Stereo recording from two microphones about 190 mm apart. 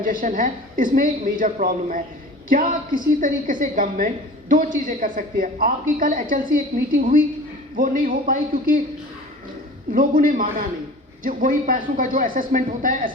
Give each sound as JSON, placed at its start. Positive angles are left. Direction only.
{"t": 0.0, "sound": "a woman's voice", "side_deg": -45}
{"t": 7.8, "sound": "a woman's voice", "side_deg": -45}
{"t": 9.9, "sound": "a woman's voice", "side_deg": -45}